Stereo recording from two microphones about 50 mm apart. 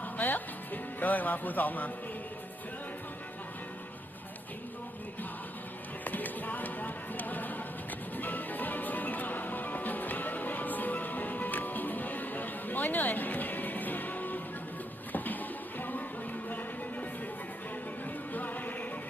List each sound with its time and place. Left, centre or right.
0.2 s music: left
6.1 s music: left
18.3 s music: left